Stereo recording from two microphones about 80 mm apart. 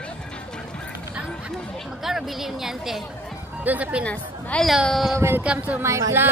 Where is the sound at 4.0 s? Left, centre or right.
Centre.